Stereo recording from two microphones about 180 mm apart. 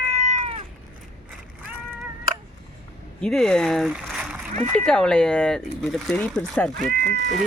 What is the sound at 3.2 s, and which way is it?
Speech, 5° left (ahead or behind).